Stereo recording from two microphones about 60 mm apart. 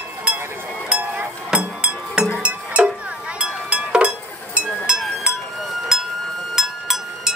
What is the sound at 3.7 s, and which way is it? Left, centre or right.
Chink, centre.